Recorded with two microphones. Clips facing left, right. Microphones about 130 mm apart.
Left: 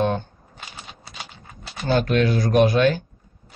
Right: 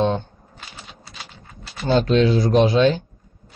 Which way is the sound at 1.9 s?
25° right (ahead or behind).